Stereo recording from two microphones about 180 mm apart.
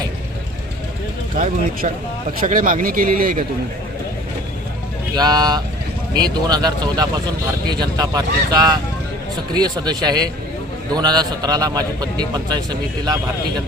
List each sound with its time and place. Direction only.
2.4 s speech: 50° right (ahead or behind)
5.1 s speech: 20° right (ahead or behind)